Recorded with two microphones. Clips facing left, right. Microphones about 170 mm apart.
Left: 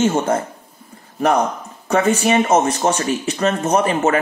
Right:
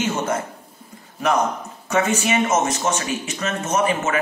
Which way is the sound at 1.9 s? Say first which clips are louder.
Left 4 dB; 35° left (ahead or behind).